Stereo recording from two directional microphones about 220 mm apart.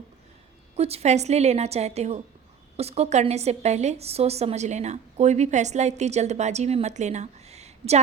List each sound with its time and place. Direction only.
0.8 s a woman's voice: 30° right (ahead or behind)